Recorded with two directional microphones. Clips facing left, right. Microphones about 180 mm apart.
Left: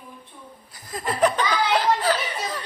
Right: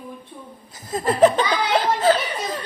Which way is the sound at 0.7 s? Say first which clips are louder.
Right 6 dB; 25° right (ahead or behind).